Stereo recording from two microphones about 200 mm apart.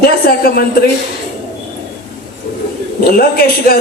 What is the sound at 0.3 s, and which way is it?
Speech, 50° left (ahead or behind).